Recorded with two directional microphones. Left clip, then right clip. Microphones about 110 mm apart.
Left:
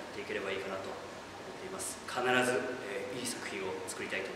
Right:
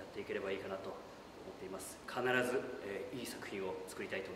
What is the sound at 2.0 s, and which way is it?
Speech, 25° left (ahead or behind).